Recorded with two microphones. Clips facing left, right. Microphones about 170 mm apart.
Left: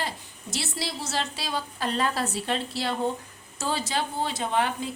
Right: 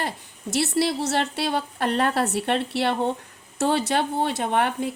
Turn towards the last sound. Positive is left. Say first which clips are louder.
# right 3 dB
turn(degrees=-60)  # may be behind; listen again after turning